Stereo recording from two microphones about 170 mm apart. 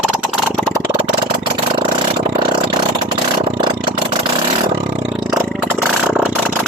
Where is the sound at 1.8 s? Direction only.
30° right (ahead or behind).